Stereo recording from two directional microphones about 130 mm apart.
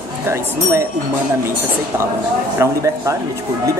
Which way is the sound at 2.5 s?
25° right (ahead or behind).